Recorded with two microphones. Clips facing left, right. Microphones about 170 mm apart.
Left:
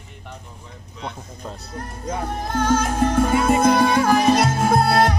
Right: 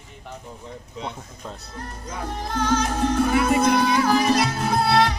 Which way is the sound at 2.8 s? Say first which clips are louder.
Left 2 dB; 50° left (ahead or behind).